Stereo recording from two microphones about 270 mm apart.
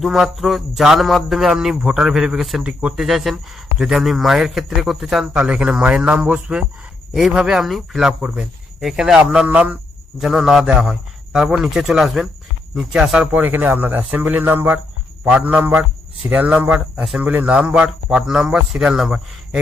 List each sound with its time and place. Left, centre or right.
0.0 s speech: centre